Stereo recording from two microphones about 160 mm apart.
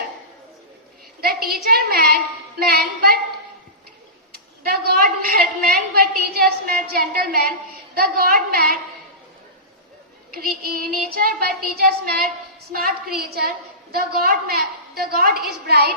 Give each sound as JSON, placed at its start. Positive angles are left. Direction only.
{"t": 1.6, "sound": "a woman's voice", "side_deg": -75}
{"t": 4.3, "sound": "a woman's voice", "side_deg": -70}
{"t": 10.3, "sound": "a woman's voice", "side_deg": -70}